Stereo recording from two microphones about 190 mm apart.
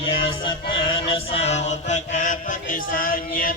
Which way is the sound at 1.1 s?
30° left (ahead or behind).